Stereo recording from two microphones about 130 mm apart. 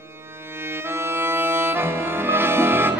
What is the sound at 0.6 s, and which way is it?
Accordion, 20° right (ahead or behind).